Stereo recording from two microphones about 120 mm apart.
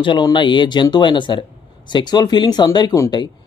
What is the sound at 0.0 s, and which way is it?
A man's voice, 40° left (ahead or behind).